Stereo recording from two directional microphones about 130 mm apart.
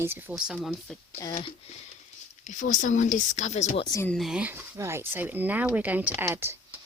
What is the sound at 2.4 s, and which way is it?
Speech, 75° left (ahead or behind).